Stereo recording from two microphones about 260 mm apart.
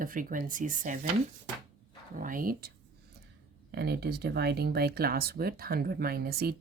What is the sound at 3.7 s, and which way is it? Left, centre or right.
Speech, right.